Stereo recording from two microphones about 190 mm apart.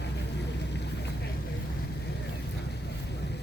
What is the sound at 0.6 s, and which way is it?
Boat, 65° left (ahead or behind).